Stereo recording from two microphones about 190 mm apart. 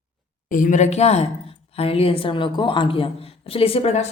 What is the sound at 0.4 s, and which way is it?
A woman's voice, 45° left (ahead or behind).